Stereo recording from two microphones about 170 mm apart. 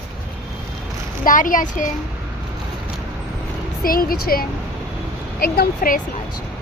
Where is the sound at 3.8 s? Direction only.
60° left (ahead or behind).